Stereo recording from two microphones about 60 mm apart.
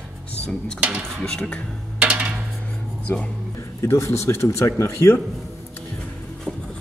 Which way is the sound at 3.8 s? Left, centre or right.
Left.